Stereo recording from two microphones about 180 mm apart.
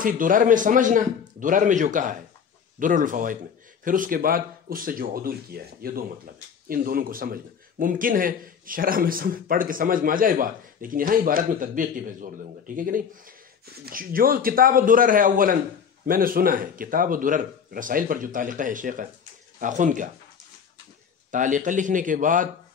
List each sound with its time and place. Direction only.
0.0 s a man's voice: 50° right (ahead or behind)
21.3 s a man's voice: 45° right (ahead or behind)